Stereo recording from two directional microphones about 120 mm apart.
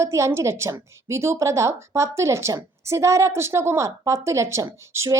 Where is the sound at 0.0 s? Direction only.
25° right (ahead or behind).